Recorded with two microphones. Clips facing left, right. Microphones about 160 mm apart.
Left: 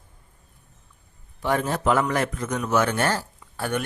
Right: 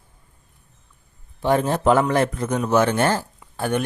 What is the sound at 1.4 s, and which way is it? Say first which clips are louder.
A man's voice: right 5 dB; 25° right (ahead or behind).